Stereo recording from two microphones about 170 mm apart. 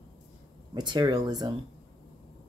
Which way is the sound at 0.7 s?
25° right (ahead or behind).